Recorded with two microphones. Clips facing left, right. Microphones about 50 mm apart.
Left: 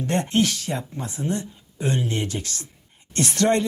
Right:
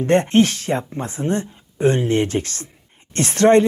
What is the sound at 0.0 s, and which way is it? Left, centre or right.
Speech, right.